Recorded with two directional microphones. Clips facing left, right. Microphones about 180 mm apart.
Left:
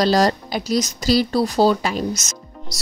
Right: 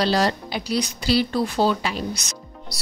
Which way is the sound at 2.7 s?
45° left (ahead or behind).